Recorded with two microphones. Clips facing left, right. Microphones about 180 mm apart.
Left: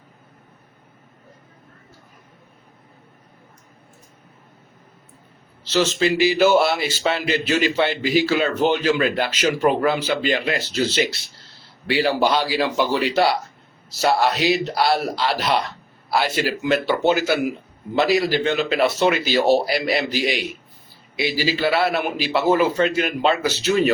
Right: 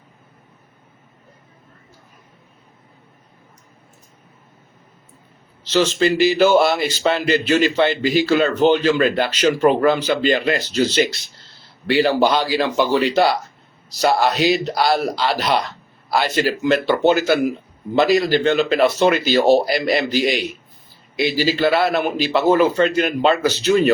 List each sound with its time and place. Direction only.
5.7 s a man's voice: 5° left (ahead or behind)